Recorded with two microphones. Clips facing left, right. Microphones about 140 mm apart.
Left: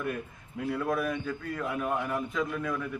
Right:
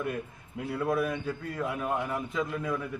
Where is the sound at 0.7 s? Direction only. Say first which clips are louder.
Right 1 dB; 30° right (ahead or behind).